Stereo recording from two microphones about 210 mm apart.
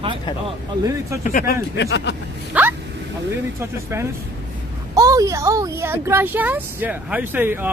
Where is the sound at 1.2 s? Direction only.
40° left (ahead or behind).